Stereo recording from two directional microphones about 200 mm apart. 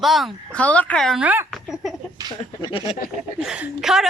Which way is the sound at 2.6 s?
25° left (ahead or behind).